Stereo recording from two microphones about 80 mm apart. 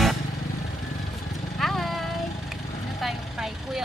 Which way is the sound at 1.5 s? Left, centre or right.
Centre.